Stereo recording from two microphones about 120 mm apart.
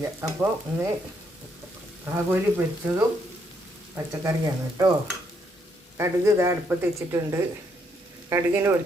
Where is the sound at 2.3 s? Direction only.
15° right (ahead or behind).